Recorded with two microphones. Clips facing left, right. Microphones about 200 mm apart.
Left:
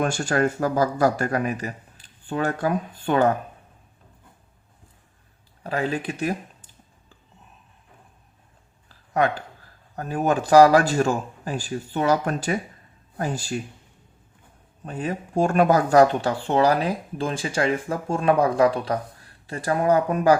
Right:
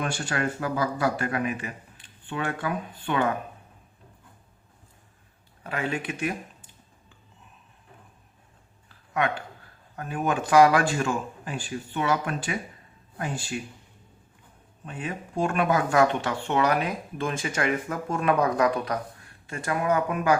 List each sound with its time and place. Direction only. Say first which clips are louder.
0.0 s speech: left 6 dB; 45° left (ahead or behind)
5.6 s speech: left 4 dB; 35° left (ahead or behind)
9.9 s speech: left 5 dB; 40° left (ahead or behind)
14.8 s speech: left 6 dB; 40° left (ahead or behind)